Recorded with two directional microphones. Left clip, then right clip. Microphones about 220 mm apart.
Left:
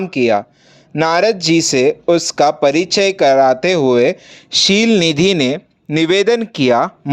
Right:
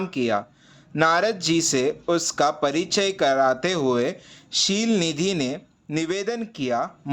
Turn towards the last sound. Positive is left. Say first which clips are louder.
# left 12 dB
turn(degrees=40)  # may be behind; listen again after turning